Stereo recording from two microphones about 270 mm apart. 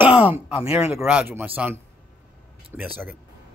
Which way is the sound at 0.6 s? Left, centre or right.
Left.